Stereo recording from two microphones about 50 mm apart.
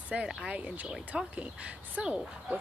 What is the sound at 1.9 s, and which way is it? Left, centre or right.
Speech, centre.